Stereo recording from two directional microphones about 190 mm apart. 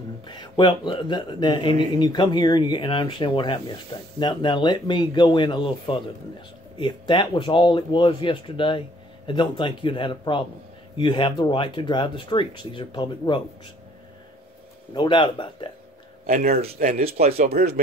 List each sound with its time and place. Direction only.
0.3 s speech: 25° left (ahead or behind)
15.0 s speech: 25° left (ahead or behind)
16.3 s speech: 50° right (ahead or behind)
16.8 s speech: 35° right (ahead or behind)
17.2 s speech: 55° right (ahead or behind)